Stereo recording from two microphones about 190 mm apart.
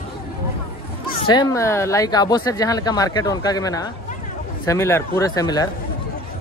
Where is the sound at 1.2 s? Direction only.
20° left (ahead or behind).